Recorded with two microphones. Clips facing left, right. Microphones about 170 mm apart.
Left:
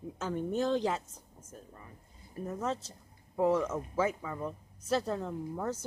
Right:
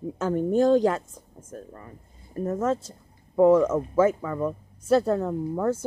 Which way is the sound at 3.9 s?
50° right (ahead or behind).